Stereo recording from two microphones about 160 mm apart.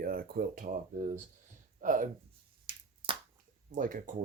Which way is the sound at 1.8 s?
55° right (ahead or behind).